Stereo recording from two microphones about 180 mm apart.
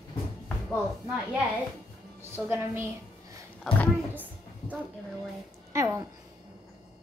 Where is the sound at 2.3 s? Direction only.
10° right (ahead or behind).